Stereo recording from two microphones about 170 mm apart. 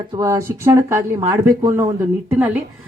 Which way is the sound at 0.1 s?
20° right (ahead or behind).